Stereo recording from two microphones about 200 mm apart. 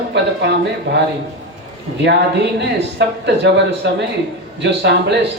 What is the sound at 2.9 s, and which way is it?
A man's voice, 60° right (ahead or behind).